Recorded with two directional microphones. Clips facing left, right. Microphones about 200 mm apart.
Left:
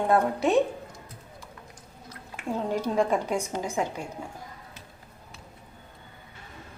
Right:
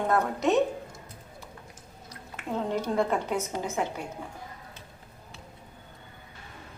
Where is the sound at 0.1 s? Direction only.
15° left (ahead or behind).